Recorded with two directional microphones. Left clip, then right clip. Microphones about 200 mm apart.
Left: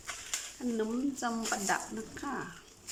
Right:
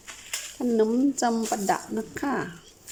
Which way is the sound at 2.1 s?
35° right (ahead or behind).